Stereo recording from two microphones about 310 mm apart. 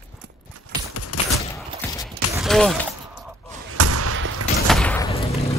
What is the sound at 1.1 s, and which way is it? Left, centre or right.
Fusillade, left.